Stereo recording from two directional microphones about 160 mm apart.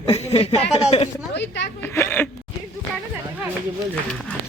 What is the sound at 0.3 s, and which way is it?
Speech, 40° left (ahead or behind).